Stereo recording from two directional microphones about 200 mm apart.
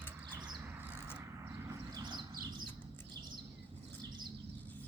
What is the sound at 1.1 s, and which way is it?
Bird, 15° right (ahead or behind).